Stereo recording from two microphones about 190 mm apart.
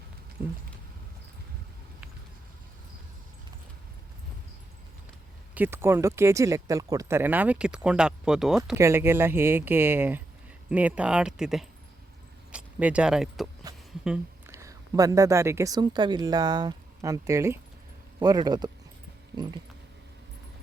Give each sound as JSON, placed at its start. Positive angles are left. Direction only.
{"t": 5.5, "sound": "speech", "side_deg": -10}
{"t": 14.0, "sound": "a sound", "side_deg": -5}
{"t": 14.5, "sound": "speech", "side_deg": -15}